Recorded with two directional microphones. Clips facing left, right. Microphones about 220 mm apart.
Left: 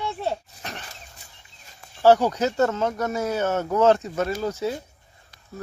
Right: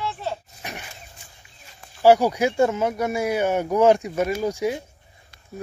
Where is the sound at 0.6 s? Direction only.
10° right (ahead or behind).